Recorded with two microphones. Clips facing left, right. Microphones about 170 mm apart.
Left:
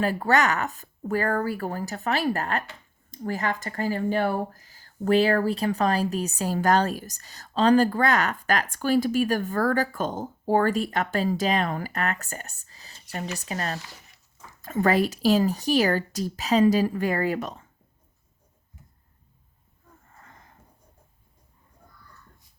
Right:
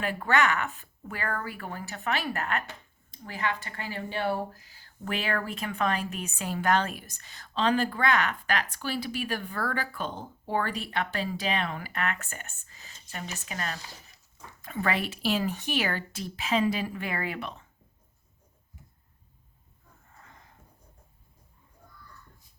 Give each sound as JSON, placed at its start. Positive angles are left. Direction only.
{"t": 0.0, "sound": "speech", "side_deg": 40}